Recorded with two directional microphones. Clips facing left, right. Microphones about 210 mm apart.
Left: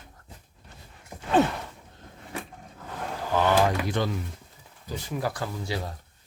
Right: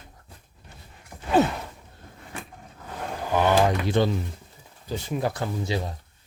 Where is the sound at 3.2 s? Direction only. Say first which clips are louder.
Right 2 dB; 15° right (ahead or behind).